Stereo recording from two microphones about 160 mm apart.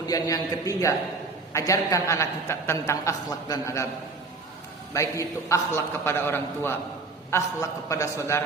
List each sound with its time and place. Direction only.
0.0 s a woman's voice: 20° left (ahead or behind)
4.9 s a man's voice: 20° left (ahead or behind)